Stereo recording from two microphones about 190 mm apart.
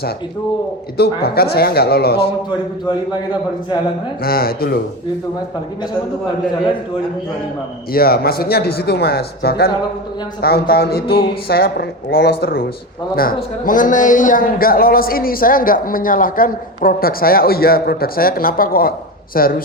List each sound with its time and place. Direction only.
0.9 s speech: 55° left (ahead or behind)
4.2 s a man's voice: 50° left (ahead or behind)
7.9 s a man's voice: 55° left (ahead or behind)